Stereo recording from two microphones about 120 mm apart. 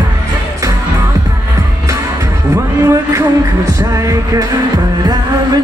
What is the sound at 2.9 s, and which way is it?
Music, 25° right (ahead or behind).